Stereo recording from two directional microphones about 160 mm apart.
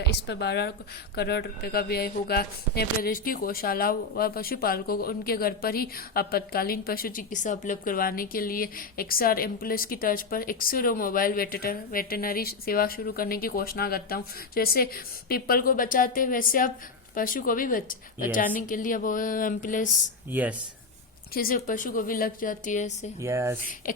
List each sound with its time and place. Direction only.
0.0 s a woman's voice: 90° left; by 19.9 s 55° left (ahead or behind)
20.3 s speech: 10° right (ahead or behind)
21.3 s a woman's voice: 65° left (ahead or behind)
23.2 s speech: 15° right (ahead or behind)